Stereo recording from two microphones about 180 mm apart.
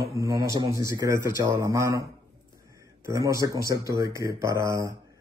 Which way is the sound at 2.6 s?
15° right (ahead or behind).